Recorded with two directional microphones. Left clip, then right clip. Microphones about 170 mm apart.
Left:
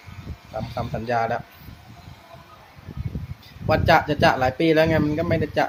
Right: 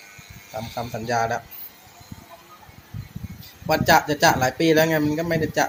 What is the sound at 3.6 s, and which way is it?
Speech, 5° left (ahead or behind).